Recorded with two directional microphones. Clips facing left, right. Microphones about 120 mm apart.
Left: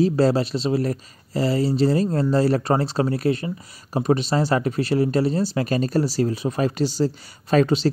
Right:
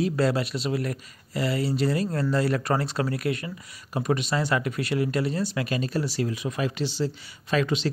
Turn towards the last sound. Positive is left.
turn(degrees=40)  # may be behind; listen again after turning